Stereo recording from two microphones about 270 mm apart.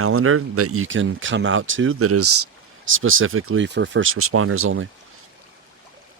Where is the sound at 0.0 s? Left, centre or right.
Right.